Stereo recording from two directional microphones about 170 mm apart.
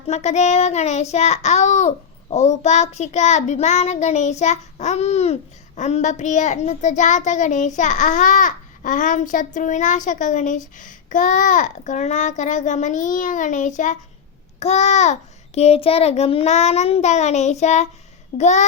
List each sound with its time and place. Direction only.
0.1 s a child's voice: 40° left (ahead or behind)
2.3 s child singing: 40° left (ahead or behind)
14.6 s a child's voice: 40° left (ahead or behind)
18.3 s child singing: 45° left (ahead or behind)